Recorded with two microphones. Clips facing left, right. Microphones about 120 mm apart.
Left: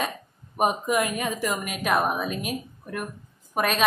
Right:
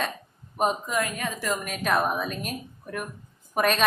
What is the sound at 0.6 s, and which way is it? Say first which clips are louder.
A woman's voice: left 2 dB; 15° left (ahead or behind).